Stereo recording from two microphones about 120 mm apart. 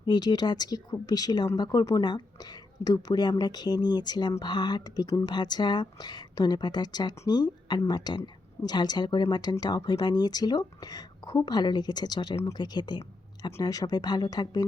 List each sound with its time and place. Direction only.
0.0 s speech: 35° left (ahead or behind)